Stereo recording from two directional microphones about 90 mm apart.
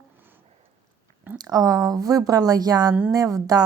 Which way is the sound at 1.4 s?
45° right (ahead or behind).